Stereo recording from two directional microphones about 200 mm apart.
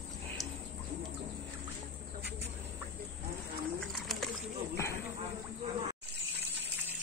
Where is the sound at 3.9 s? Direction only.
Centre (ahead or behind).